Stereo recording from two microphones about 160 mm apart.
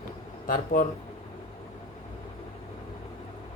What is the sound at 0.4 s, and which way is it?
Speech, 60° left (ahead or behind).